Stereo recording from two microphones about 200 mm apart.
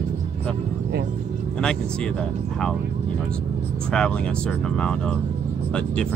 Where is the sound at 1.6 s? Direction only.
5° left (ahead or behind).